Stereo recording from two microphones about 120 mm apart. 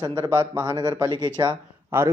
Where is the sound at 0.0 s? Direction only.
35° right (ahead or behind).